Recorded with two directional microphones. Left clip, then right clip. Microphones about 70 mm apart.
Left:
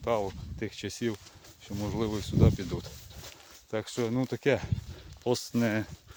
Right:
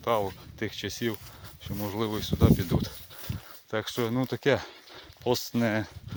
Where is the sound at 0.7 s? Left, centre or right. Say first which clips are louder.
Right 1 dB; left.